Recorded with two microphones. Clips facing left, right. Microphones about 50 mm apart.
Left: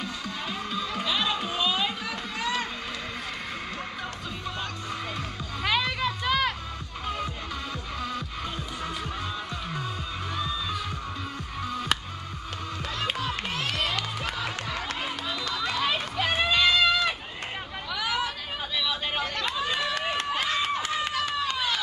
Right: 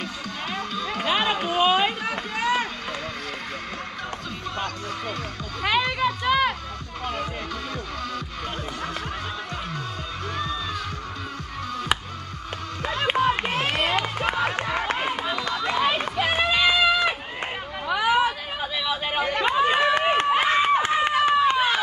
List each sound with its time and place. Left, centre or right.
1.0 s run: right
5.6 s a sound: centre
10.3 s music: centre
12.8 s run: right
16.2 s run: centre
17.8 s hubbub: right
18.6 s a sound: centre
19.4 s run: right